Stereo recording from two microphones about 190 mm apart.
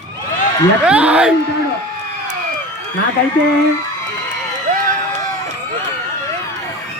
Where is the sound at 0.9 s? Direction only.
5° right (ahead or behind).